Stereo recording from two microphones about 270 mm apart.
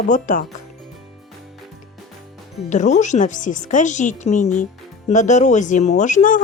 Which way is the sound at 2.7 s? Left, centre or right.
Left.